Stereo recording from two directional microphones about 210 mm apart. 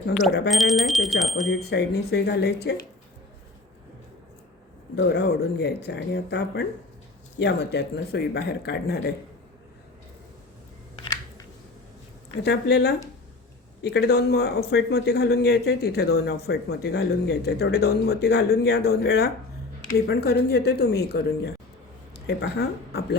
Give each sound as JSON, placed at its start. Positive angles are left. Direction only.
{"t": 0.1, "sound": "speech", "side_deg": 0}
{"t": 1.7, "sound": "a man's voice", "side_deg": 50}
{"t": 4.9, "sound": "a man's voice", "side_deg": 50}
{"t": 12.4, "sound": "a man's voice", "side_deg": 50}